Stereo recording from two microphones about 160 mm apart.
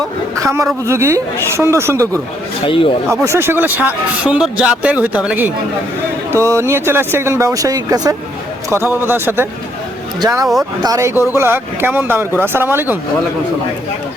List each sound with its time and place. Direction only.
0.4 s a man's voice: 20° right (ahead or behind)
2.6 s speech: 35° left (ahead or behind)
3.1 s a man's voice: 15° right (ahead or behind)
10.4 s speech: centre (ahead or behind)
10.8 s a man's voice: 20° right (ahead or behind)